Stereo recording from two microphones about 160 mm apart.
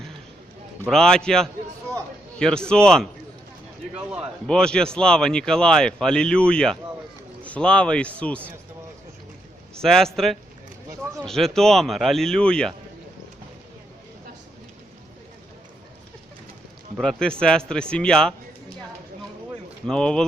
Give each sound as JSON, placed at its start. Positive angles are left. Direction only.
{"t": 0.9, "sound": "speech", "side_deg": 5}
{"t": 4.4, "sound": "speech", "side_deg": 5}
{"t": 9.7, "sound": "speech", "side_deg": 5}
{"t": 17.0, "sound": "speech", "side_deg": 5}
{"t": 19.9, "sound": "speech", "side_deg": 5}